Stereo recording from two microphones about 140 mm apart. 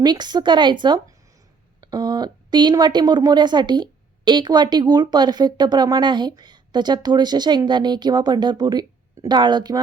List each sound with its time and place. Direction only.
0.0 s speech: 30° right (ahead or behind)